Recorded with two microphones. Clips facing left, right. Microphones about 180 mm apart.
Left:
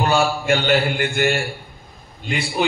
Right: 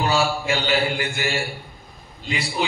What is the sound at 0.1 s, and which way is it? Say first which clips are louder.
A man's voice: left 3 dB; 55° left (ahead or behind).